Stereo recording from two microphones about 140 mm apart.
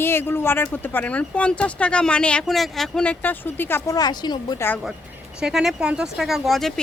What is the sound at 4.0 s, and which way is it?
Speech, 30° left (ahead or behind).